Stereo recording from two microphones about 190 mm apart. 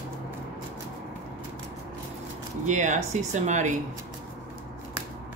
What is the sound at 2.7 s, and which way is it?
Speech, 40° right (ahead or behind).